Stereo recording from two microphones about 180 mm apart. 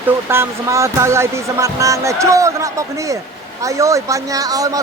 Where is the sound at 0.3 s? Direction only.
15° right (ahead or behind).